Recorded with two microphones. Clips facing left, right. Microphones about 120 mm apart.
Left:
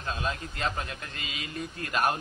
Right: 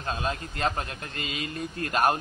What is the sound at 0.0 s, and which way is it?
A man's voice, 40° right (ahead or behind).